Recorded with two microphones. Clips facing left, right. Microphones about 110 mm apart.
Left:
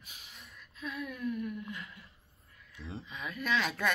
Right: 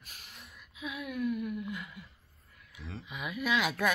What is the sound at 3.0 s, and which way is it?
Speech, 10° right (ahead or behind).